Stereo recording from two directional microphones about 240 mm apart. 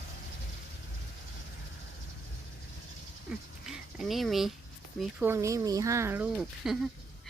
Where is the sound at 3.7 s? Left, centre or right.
Centre.